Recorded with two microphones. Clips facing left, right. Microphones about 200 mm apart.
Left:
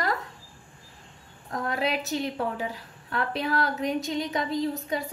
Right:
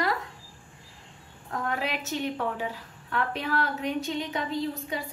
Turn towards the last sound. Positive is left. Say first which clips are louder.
# left 3 dB
turn(degrees=40)  # may be behind; listen again after turning